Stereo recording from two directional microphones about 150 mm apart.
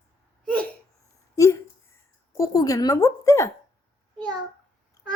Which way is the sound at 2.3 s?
20° left (ahead or behind).